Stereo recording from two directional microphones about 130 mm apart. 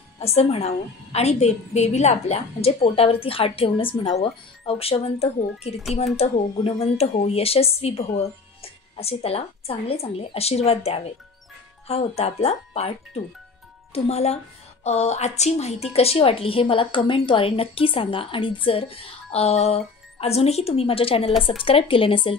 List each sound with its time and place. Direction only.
0.2 s a woman's voice: 50° left (ahead or behind)